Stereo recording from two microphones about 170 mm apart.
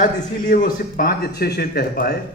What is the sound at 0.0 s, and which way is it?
Speech, 50° left (ahead or behind).